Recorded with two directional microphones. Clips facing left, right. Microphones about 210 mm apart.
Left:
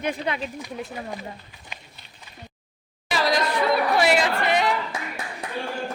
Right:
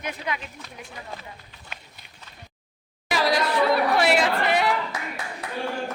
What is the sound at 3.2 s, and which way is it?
Chatter, 10° right (ahead or behind).